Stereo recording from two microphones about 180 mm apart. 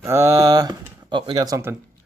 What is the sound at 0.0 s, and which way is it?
Speech, 15° right (ahead or behind).